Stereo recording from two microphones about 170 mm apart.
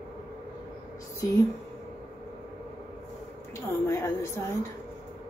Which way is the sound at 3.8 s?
15° left (ahead or behind).